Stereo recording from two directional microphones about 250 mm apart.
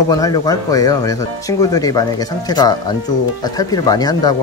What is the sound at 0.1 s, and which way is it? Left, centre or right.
Speech, centre.